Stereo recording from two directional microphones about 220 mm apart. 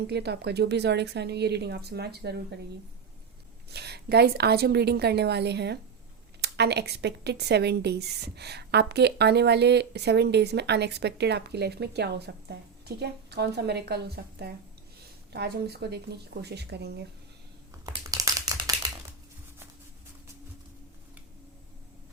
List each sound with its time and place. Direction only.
0.1 s a woman's voice: 50° right (ahead or behind)
3.7 s a woman's voice: 50° right (ahead or behind)
17.8 s typewriter: 15° right (ahead or behind)